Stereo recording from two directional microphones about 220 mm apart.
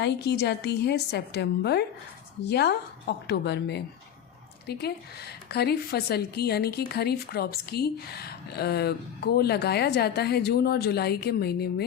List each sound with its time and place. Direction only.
0.0 s a woman's voice: 50° left (ahead or behind)